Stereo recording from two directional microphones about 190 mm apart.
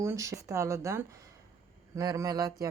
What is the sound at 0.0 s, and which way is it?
Speech, 15° right (ahead or behind).